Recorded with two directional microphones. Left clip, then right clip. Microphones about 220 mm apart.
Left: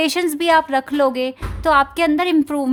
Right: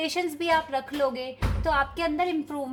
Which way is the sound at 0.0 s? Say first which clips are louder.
Left 10 dB; 50° left (ahead or behind).